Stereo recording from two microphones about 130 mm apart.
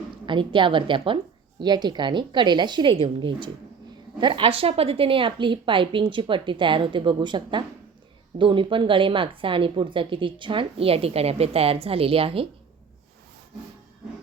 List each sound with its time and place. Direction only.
0.3 s a woman's voice: 40° right (ahead or behind)